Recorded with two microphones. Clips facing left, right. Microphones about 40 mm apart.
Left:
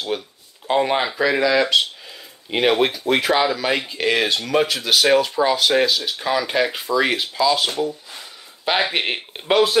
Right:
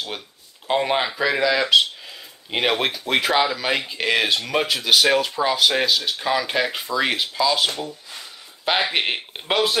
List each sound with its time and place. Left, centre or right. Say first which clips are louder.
0.7 s speech: left 2 dB; centre